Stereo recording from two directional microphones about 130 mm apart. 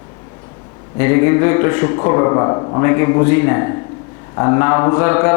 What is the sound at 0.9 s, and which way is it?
Speech, 20° left (ahead or behind).